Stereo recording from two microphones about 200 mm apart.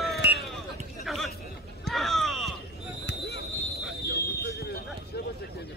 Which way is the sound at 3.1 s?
55° left (ahead or behind).